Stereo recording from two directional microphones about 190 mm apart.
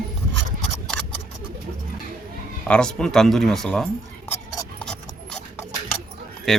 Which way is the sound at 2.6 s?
5° left (ahead or behind).